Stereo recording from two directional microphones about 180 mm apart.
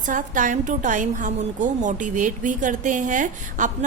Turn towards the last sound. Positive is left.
turn(degrees=-45)  # may be behind; listen again after turning